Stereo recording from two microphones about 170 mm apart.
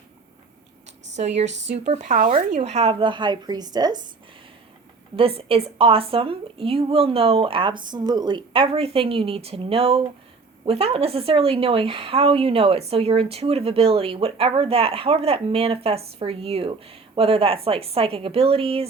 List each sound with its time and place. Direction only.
1.1 s a woman's voice: 40° right (ahead or behind); by 4.1 s 25° right (ahead or behind)
5.1 s a woman's voice: 35° right (ahead or behind)